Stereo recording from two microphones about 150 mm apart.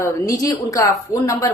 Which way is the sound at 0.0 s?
20° left (ahead or behind).